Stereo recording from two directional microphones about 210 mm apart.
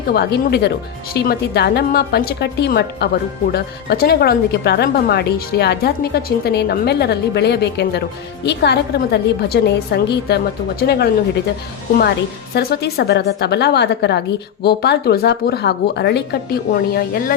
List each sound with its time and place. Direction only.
0.1 s a woman's voice: 50° left (ahead or behind)
12.5 s a woman's voice: 50° left (ahead or behind)